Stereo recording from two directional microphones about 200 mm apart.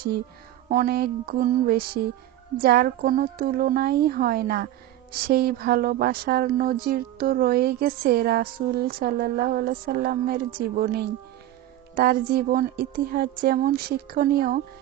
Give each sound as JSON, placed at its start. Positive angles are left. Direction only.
{"t": 0.7, "sound": "speech", "side_deg": -45}